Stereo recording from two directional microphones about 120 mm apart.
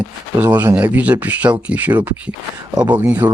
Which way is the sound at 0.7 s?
10° right (ahead or behind).